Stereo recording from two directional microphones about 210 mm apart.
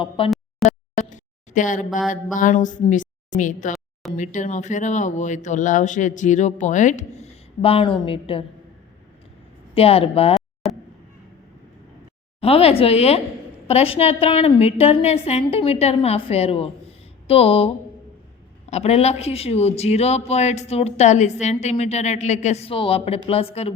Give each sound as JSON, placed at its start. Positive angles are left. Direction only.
{"t": 0.2, "sound": "a woman's voice", "side_deg": 25}
{"t": 0.6, "sound": "a sound", "side_deg": 35}
{"t": 4.2, "sound": "a woman's voice", "side_deg": 35}
{"t": 9.7, "sound": "a woman's voice", "side_deg": 30}
{"t": 12.4, "sound": "a woman's voice", "side_deg": 30}
{"t": 18.7, "sound": "speech", "side_deg": 30}